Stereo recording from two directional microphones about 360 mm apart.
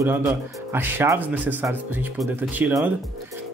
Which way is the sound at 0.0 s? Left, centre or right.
Centre.